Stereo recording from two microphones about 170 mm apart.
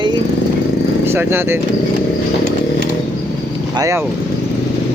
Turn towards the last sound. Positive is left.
turn(degrees=-20)  # may be behind; listen again after turning